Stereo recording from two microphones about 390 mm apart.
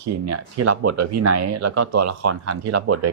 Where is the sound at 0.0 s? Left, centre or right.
Right.